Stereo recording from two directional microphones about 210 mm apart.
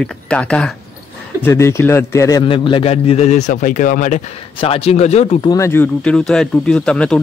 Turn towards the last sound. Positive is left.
turn(degrees=5)  # may be behind; listen again after turning